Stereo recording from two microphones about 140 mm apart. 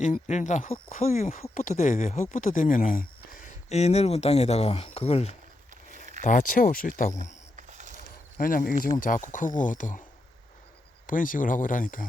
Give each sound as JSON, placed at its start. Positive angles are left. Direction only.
{"t": 0.0, "sound": "speech", "side_deg": 60}
{"t": 3.7, "sound": "speech", "side_deg": 50}
{"t": 6.2, "sound": "speech", "side_deg": 70}
{"t": 7.5, "sound": "a sound", "side_deg": -60}
{"t": 8.4, "sound": "speech", "side_deg": 80}
{"t": 11.0, "sound": "speech", "side_deg": 75}